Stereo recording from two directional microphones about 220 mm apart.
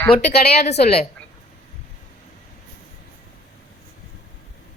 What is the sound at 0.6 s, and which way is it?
Speech, 30° left (ahead or behind).